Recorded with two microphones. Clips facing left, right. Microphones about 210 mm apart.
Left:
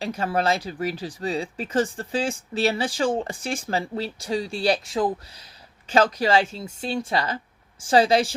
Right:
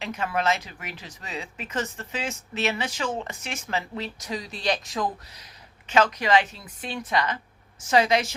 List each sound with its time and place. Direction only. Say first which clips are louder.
0.0 s speech: left 3 dB; 35° left (ahead or behind)